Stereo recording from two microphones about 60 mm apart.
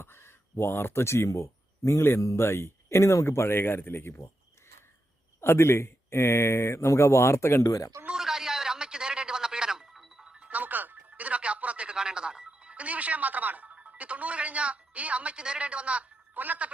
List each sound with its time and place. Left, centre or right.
0.0 s speech: left
5.4 s speech: left
8.1 s music: centre
10.5 s music: right